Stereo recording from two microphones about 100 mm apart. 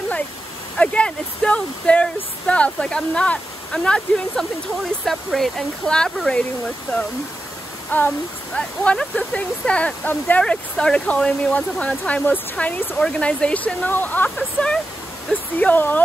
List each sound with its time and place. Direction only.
0.7 s speech: 10° left (ahead or behind)
7.9 s speech: 15° left (ahead or behind)